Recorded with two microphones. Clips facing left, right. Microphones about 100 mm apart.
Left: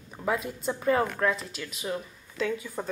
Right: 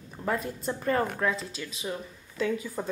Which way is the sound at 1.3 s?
30° right (ahead or behind).